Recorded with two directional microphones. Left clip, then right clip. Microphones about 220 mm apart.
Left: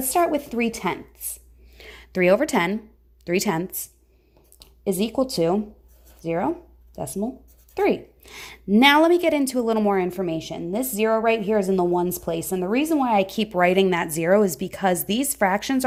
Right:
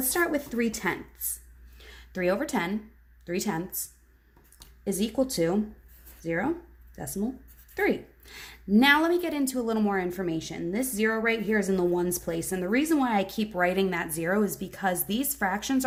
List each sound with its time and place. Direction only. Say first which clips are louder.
0.3 s a woman's voice: left 5 dB; 20° left (ahead or behind)